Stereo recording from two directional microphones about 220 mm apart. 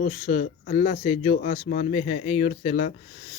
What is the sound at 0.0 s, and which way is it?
Speech, 35° left (ahead or behind).